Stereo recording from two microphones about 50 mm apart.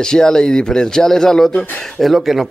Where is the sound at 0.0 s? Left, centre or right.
Centre.